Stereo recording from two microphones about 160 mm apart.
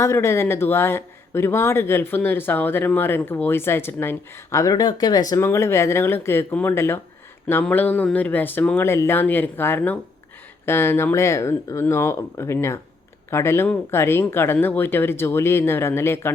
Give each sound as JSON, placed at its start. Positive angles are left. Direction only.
{"t": 0.0, "sound": "speech", "side_deg": 15}